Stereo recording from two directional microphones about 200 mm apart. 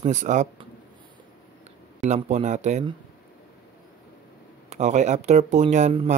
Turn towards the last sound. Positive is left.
turn(degrees=-30)  # may be behind; listen again after turning